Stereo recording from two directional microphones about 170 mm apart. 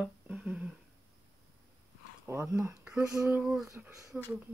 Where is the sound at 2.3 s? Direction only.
15° right (ahead or behind).